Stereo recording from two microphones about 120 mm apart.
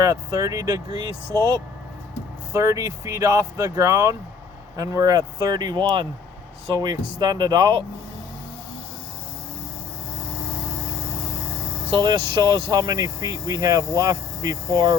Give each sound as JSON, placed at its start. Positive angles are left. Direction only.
{"t": 0.0, "sound": "speech", "side_deg": -30}
{"t": 2.6, "sound": "speech", "side_deg": -25}
{"t": 11.9, "sound": "speech", "side_deg": -40}